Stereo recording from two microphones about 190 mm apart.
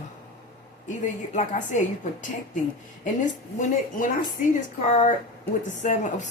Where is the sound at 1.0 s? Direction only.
40° left (ahead or behind).